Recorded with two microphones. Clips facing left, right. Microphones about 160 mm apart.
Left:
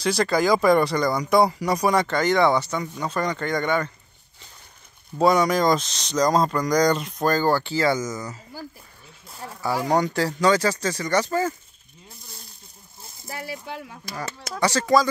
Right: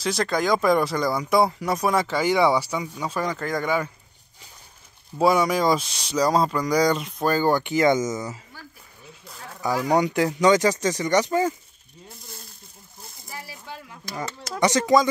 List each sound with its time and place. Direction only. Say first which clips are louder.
0.0 s speech: left 3 dB; centre (ahead or behind)
5.2 s speech: left 1 dB; 5° right (ahead or behind); by 8.4 s 20° right (ahead or behind)
9.9 s speech: right 1 dB; 20° right (ahead or behind)
13.3 s speech: left 6 dB; 75° left (ahead or behind)
14.6 s speech: right 1 dB; 20° right (ahead or behind)